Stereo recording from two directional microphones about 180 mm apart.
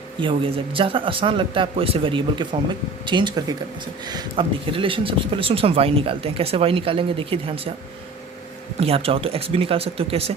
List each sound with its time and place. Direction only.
0.2 s speech: 30° right (ahead or behind)
8.8 s speech: 30° right (ahead or behind)